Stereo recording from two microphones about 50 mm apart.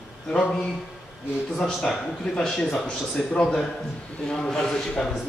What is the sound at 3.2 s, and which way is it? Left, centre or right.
A man's voice, centre.